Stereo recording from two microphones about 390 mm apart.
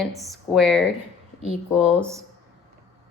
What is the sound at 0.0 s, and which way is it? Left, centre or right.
Speech, centre.